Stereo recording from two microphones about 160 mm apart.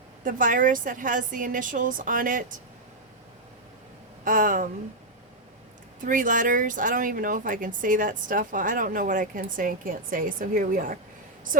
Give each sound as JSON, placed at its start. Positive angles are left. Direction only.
{"t": 0.3, "sound": "speech", "side_deg": -60}
{"t": 4.2, "sound": "speech", "side_deg": -60}
{"t": 6.1, "sound": "speech", "side_deg": -55}